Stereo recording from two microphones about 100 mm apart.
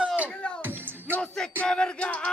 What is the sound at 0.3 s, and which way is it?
Music, 10° left (ahead or behind).